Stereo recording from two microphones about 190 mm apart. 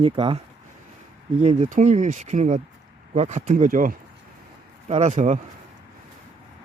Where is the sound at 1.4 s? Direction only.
35° right (ahead or behind).